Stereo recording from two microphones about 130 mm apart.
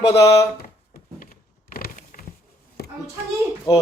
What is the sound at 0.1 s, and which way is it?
Speech, 20° left (ahead or behind).